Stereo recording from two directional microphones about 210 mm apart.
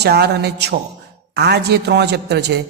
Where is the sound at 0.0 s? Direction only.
50° right (ahead or behind).